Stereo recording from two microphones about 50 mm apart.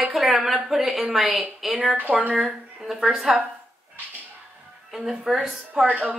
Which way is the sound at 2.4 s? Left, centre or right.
Centre.